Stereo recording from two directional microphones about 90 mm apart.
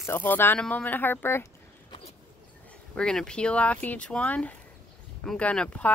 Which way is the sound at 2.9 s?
5° left (ahead or behind).